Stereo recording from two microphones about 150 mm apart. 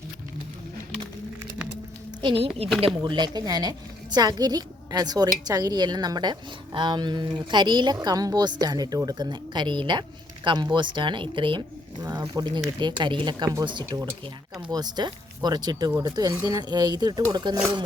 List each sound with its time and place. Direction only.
2.2 s a woman's voice: 35° right (ahead or behind)
12.0 s a woman's voice: 25° right (ahead or behind)